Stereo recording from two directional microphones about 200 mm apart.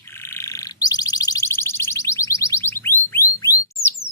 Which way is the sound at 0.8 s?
20° left (ahead or behind).